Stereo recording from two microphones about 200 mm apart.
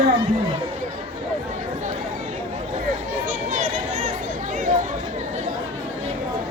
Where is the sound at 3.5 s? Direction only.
40° right (ahead or behind).